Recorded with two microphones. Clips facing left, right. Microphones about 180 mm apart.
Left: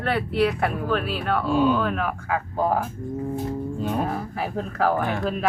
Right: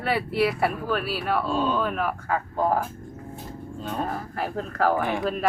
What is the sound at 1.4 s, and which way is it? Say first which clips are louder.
Speech: left 8 dB; 10° left (ahead or behind).